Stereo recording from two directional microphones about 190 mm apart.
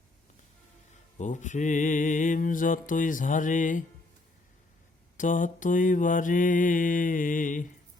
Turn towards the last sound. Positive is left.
turn(degrees=45)  # may be behind; listen again after turning